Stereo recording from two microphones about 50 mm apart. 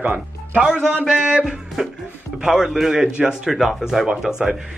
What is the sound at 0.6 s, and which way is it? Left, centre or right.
Speech, centre.